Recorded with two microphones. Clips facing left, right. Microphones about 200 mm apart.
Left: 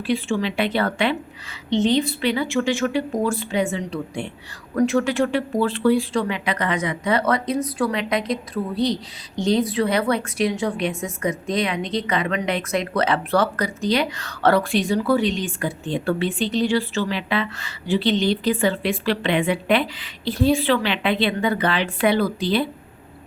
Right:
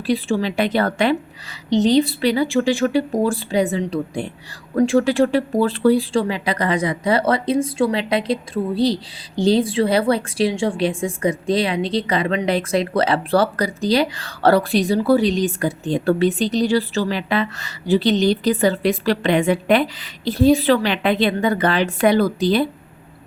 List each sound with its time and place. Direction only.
0.1 s speech: 35° right (ahead or behind)